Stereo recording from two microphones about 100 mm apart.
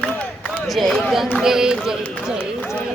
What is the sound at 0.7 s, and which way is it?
Speech, centre (ahead or behind).